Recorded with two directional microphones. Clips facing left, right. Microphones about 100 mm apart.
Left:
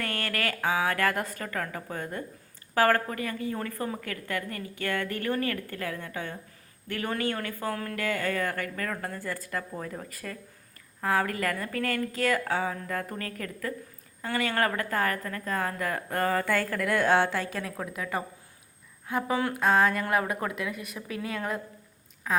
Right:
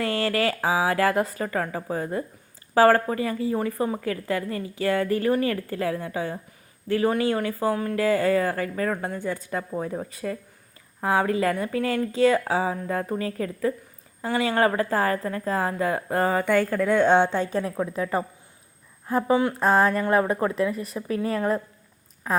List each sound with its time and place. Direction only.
0.0 s a woman's voice: 25° right (ahead or behind)
19.4 s a woman's voice: 20° right (ahead or behind)
19.6 s a woman's voice: 35° right (ahead or behind)